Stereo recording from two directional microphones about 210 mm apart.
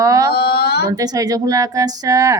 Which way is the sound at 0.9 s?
15° right (ahead or behind).